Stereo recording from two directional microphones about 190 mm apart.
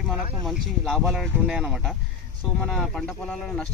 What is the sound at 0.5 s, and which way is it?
Speech, centre (ahead or behind).